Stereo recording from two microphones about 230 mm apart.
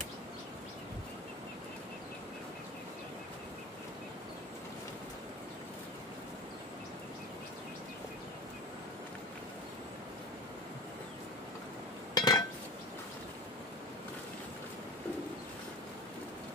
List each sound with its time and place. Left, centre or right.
12.1 s chink: centre